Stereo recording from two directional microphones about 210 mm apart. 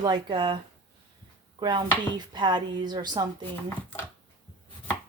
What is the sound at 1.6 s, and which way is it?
Chopping, 20° right (ahead or behind).